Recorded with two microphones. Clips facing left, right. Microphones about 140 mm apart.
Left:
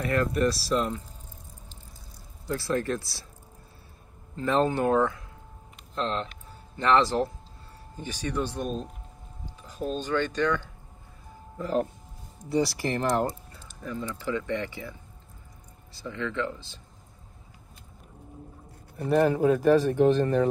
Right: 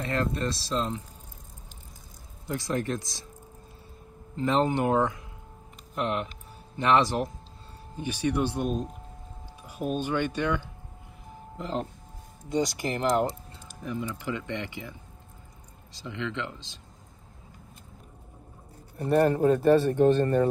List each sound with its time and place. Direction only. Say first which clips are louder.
0.0 s speech: left 4 dB; 25° right (ahead or behind)
2.4 s speech: left 2 dB; 15° right (ahead or behind)
4.4 s speech: even; 20° right (ahead or behind)
16.0 s speech: left 3 dB; 15° right (ahead or behind)
18.9 s speech: even; centre (ahead or behind)